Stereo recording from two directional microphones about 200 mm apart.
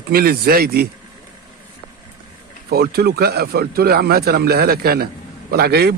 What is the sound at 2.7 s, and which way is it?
A man's voice, 50° right (ahead or behind).